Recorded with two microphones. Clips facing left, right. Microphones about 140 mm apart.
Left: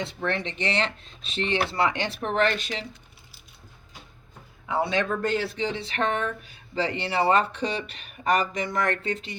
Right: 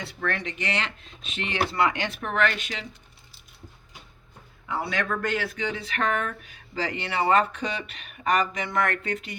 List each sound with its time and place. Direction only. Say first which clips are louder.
0.0 s speech: left 2 dB; 20° left (ahead or behind)
4.7 s speech: left 3 dB; 25° left (ahead or behind)